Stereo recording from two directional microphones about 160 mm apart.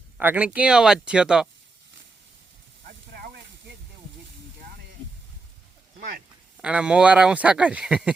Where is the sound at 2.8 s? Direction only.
70° right (ahead or behind).